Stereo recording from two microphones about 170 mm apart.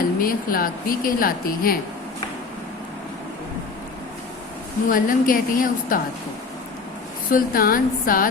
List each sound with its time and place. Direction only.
0.2 s a woman's voice: 55° left (ahead or behind)
4.9 s a woman's voice: 55° left (ahead or behind)
7.3 s a woman's voice: 55° left (ahead or behind)